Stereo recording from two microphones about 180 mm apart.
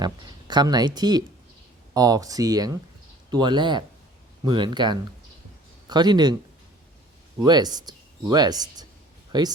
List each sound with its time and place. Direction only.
0.0 s speech: 25° right (ahead or behind)
7.4 s speech: 20° right (ahead or behind)